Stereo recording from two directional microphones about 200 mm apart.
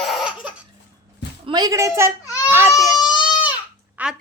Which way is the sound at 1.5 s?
20° right (ahead or behind).